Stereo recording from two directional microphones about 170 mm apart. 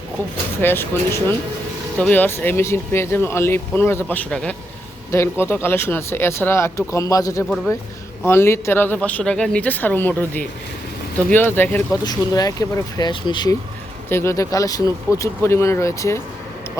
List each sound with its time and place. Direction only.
0.6 s speech: 15° left (ahead or behind)
14.1 s speech: 15° left (ahead or behind)